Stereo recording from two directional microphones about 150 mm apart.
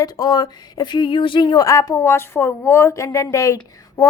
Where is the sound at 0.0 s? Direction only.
25° left (ahead or behind).